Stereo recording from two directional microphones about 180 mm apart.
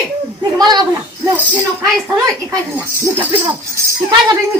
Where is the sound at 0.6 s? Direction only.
20° right (ahead or behind).